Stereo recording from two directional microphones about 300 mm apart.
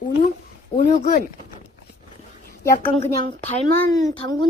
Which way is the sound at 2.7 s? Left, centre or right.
Left.